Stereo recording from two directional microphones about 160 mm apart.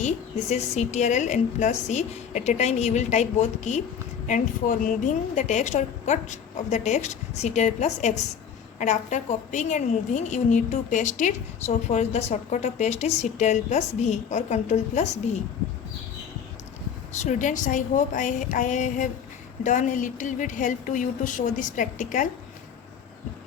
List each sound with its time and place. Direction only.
0.0 s a woman's voice: 45° left (ahead or behind)
17.1 s a woman's voice: 45° left (ahead or behind)